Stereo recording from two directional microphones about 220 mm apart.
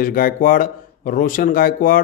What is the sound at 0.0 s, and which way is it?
A man's voice, 40° left (ahead or behind).